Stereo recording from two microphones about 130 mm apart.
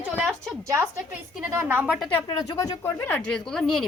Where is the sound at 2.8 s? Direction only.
15° left (ahead or behind).